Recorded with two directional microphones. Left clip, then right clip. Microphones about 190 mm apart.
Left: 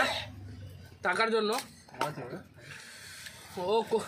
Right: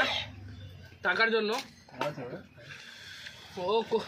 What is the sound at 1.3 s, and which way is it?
Speech, 5° right (ahead or behind).